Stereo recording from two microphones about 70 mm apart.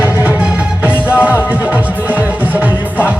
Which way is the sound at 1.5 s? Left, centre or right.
Right.